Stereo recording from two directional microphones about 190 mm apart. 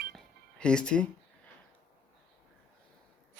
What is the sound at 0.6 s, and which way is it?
Speech, 5° left (ahead or behind).